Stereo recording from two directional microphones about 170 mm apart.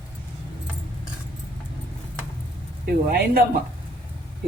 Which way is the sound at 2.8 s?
60° right (ahead or behind).